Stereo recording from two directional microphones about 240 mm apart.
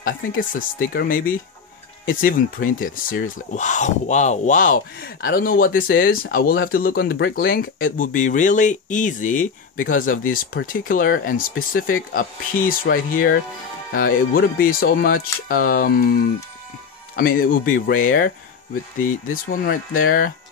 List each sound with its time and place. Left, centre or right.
0.5 s speech: left